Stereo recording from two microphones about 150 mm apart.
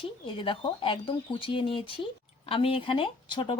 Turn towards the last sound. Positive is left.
turn(degrees=35)  # may be behind; listen again after turning